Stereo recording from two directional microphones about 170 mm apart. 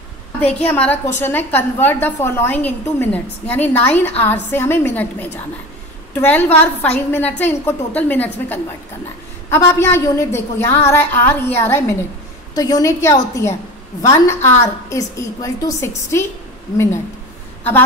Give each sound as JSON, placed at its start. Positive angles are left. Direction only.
{"t": 0.4, "sound": "a woman's voice", "side_deg": 10}